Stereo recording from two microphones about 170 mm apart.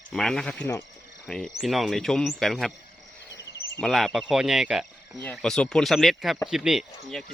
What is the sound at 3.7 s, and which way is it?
Speech, centre (ahead or behind).